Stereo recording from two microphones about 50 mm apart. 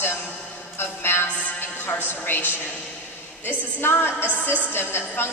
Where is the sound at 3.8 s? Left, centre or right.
Left.